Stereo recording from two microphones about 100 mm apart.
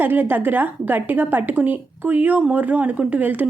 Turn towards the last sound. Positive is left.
turn(degrees=-15)  # may be behind; listen again after turning